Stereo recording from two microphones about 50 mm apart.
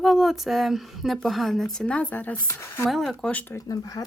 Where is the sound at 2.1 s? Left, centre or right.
Left.